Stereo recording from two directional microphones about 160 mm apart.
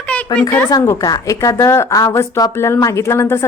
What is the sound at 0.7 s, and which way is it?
A woman's voice, 20° left (ahead or behind).